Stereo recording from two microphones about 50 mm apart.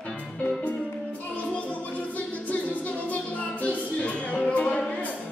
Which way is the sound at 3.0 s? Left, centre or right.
Left.